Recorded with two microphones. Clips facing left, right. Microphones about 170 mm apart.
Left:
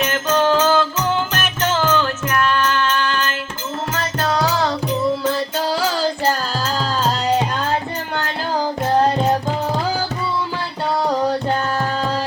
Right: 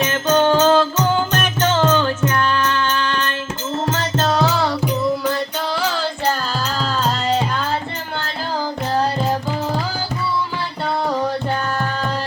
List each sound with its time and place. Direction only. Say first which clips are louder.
0.0 s music: right 2 dB; 30° right (ahead or behind)